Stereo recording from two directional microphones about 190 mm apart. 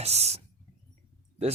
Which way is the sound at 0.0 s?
35° right (ahead or behind).